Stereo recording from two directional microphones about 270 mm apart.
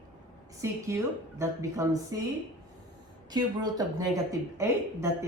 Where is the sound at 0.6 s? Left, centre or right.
Centre.